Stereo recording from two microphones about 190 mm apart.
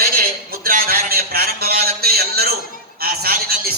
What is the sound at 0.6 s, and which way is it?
A man's voice, 50° right (ahead or behind).